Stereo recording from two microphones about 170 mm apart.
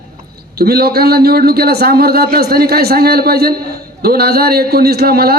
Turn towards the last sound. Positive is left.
turn(degrees=-65)  # may be behind; listen again after turning